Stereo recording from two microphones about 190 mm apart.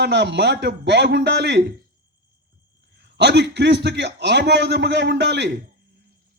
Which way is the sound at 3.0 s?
65° right (ahead or behind).